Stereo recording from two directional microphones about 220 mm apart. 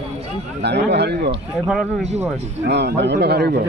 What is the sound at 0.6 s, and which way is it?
Speech, 50° right (ahead or behind).